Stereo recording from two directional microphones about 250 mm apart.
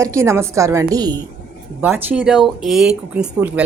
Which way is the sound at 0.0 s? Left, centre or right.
Centre.